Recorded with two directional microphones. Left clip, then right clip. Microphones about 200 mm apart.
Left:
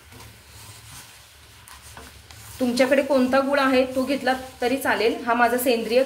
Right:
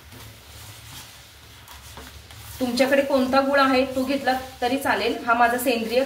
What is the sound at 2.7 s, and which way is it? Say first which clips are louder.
A woman's voice: even; 60° left (ahead or behind).